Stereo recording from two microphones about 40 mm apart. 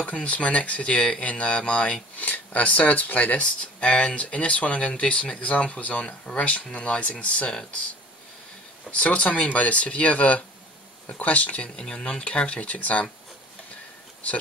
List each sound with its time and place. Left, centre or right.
0.0 s speech: left
2.1 s speech: left
8.9 s speech: left
11.7 s speech: centre
12.5 s speech: left